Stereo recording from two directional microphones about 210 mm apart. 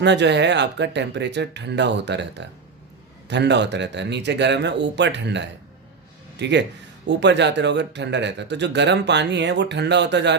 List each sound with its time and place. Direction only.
0.0 s speech: 55° right (ahead or behind)